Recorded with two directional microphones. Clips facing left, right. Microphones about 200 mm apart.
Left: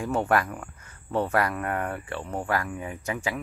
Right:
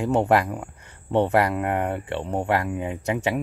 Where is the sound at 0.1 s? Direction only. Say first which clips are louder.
Right 4 dB; 20° right (ahead or behind).